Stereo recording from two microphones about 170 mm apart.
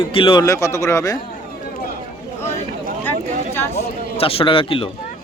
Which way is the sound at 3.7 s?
35° left (ahead or behind).